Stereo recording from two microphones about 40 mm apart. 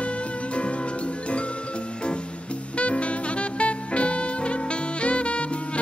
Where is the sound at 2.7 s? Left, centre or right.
Left.